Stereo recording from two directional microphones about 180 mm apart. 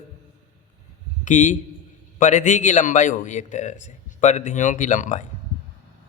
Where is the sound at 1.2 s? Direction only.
45° left (ahead or behind).